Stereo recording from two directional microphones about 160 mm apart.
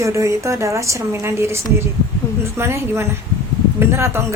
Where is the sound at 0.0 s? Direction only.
20° right (ahead or behind).